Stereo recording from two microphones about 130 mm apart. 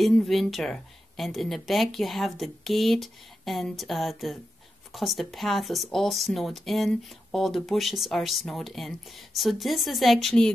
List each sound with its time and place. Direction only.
0.0 s speech: centre (ahead or behind)